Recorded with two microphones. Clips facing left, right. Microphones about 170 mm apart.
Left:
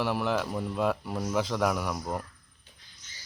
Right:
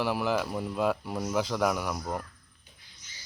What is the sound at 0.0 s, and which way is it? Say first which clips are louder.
Speech: even; centre (ahead or behind).